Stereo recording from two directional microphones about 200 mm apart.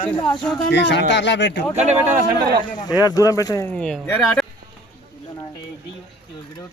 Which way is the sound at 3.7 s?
5° left (ahead or behind).